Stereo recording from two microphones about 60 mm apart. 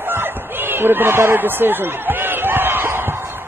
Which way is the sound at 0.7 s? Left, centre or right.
Right.